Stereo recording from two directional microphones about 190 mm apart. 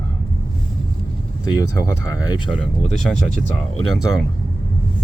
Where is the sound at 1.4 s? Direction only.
20° left (ahead or behind).